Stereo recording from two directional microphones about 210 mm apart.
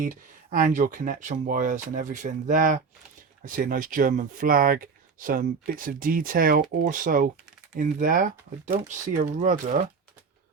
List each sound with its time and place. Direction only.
0.0 s speech: 40° right (ahead or behind)